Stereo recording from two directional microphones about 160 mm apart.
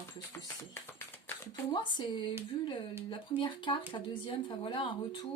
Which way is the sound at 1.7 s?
30° left (ahead or behind).